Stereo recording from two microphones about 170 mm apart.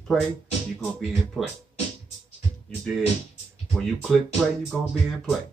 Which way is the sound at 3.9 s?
Centre (ahead or behind).